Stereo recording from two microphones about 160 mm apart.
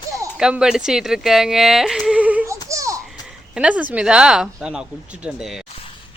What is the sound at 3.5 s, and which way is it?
A woman's voice, 5° right (ahead or behind).